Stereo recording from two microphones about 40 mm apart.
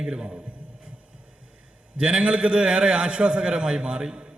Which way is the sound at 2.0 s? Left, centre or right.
Right.